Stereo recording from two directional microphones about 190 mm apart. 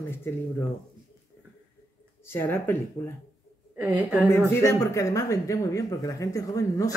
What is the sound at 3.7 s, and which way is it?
Speech, 10° right (ahead or behind).